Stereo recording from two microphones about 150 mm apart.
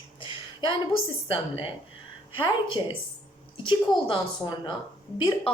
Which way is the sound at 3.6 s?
35° left (ahead or behind).